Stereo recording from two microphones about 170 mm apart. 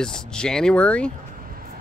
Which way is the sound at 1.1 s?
55° right (ahead or behind).